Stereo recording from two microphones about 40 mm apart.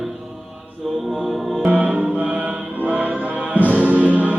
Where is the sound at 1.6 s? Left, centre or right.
Right.